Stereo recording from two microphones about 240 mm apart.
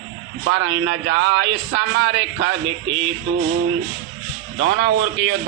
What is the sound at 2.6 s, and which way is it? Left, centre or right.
Speech, right.